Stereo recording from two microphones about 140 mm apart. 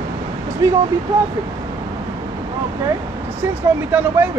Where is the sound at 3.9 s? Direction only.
10° right (ahead or behind).